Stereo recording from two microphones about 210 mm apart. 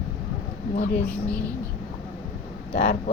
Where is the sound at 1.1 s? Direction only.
5° left (ahead or behind).